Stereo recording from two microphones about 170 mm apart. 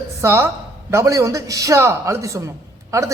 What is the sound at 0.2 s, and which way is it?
A man's voice, 15° right (ahead or behind).